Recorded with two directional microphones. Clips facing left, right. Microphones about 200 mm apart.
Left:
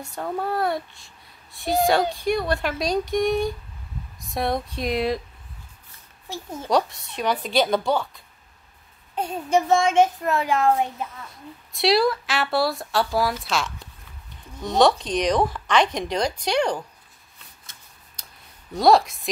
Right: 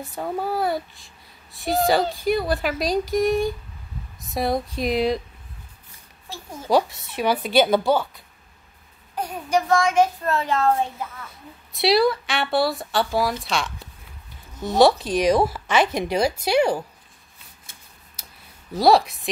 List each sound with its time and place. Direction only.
0.0 s a child's voice: centre (ahead or behind)
6.7 s a child's voice: 5° right (ahead or behind)
9.1 s a child's voice: 25° left (ahead or behind)
11.2 s a child's voice: centre (ahead or behind)
18.2 s a sound: 5° right (ahead or behind)
18.7 s a child's voice: centre (ahead or behind)